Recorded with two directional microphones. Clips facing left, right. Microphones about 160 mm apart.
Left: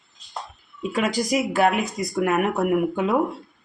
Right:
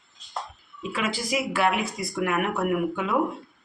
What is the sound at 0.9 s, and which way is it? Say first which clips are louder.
Speech: left 5 dB; 40° left (ahead or behind).